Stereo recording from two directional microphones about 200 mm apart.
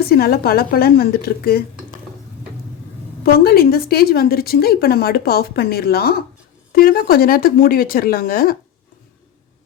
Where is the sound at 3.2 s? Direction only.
50° left (ahead or behind).